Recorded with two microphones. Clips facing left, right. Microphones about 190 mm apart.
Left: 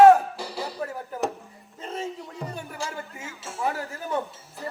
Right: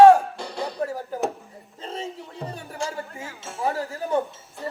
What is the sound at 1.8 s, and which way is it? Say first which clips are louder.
Music: left 1 dB; 30° right (ahead or behind).